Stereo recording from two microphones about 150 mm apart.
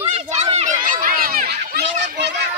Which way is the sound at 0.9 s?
70° right (ahead or behind).